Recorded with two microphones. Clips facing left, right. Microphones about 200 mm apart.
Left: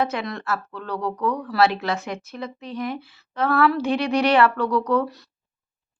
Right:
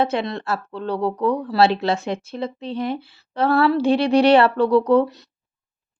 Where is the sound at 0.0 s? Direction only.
30° right (ahead or behind).